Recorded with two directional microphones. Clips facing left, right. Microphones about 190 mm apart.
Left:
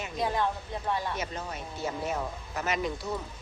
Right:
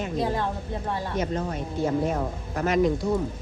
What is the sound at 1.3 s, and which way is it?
Speech, 50° right (ahead or behind).